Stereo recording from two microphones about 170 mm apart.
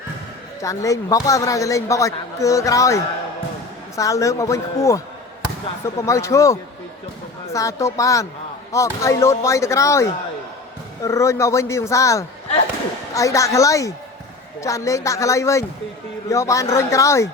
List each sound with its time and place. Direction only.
0.6 s a man's voice: 20° left (ahead or behind)